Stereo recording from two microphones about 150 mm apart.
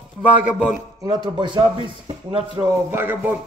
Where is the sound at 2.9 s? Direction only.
15° right (ahead or behind).